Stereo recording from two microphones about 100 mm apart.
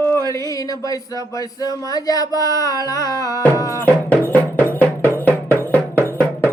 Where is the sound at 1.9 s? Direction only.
40° left (ahead or behind).